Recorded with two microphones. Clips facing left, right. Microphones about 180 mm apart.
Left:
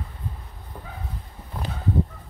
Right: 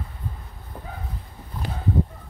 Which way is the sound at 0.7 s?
5° right (ahead or behind).